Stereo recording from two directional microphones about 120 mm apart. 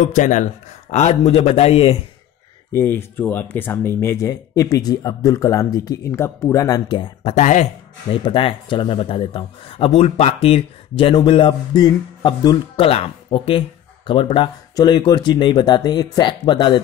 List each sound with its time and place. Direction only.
0.0 s speech: 90° left; by 2.0 s 55° left (ahead or behind)
2.7 s speech: 20° left (ahead or behind)
7.2 s speech: 75° left (ahead or behind)
8.1 s speech: 45° left (ahead or behind)